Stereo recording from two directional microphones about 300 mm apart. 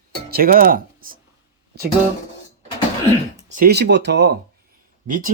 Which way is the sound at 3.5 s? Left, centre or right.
Right.